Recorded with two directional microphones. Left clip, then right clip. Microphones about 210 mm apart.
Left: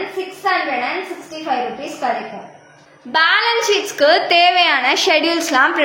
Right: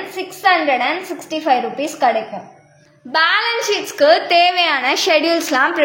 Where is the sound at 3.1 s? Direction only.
25° right (ahead or behind).